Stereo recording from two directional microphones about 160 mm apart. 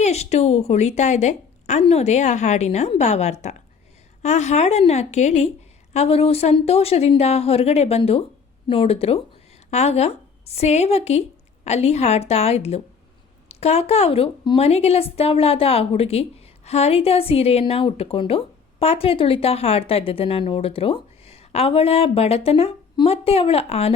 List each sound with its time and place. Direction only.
0.0 s a woman's voice: 45° left (ahead or behind)